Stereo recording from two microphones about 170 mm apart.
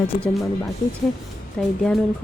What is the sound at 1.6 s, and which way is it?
Speech, 5° left (ahead or behind).